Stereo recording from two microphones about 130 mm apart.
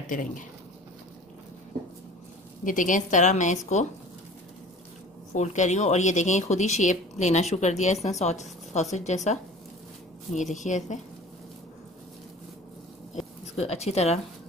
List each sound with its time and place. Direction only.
0.1 s speech: 90° left
2.6 s a woman's voice: 90° left; by 3.8 s 65° left (ahead or behind)
5.3 s a woman's voice: 65° left (ahead or behind)
13.1 s a sound: 55° left (ahead or behind)